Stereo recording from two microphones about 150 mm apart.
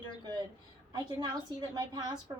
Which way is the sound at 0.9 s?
25° right (ahead or behind).